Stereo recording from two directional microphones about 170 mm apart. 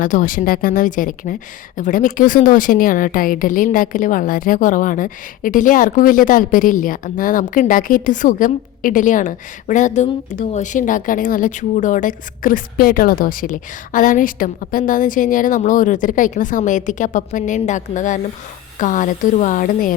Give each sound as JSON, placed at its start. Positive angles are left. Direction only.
{"t": 0.0, "sound": "speech", "side_deg": 50}